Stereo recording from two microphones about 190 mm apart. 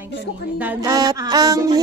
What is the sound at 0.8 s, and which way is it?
A woman's voice, 20° right (ahead or behind).